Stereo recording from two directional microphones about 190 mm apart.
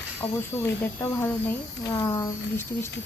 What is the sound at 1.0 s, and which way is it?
Speech, 10° left (ahead or behind).